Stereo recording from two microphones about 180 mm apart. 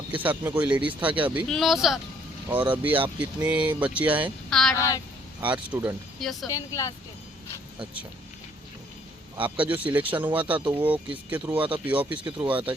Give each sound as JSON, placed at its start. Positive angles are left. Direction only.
{"t": 0.2, "sound": "speech", "side_deg": -10}
{"t": 4.4, "sound": "a woman's voice", "side_deg": 5}
{"t": 4.7, "sound": "speech", "side_deg": 20}
{"t": 5.4, "sound": "speech", "side_deg": -10}
{"t": 6.5, "sound": "speech", "side_deg": 15}
{"t": 9.4, "sound": "speech", "side_deg": -10}